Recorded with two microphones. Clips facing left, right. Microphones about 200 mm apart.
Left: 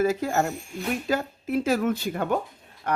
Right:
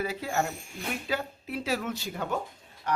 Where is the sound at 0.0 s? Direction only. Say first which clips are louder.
Left 7 dB; 45° left (ahead or behind).